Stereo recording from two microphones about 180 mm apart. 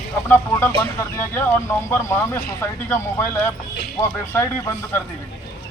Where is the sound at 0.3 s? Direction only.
15° left (ahead or behind).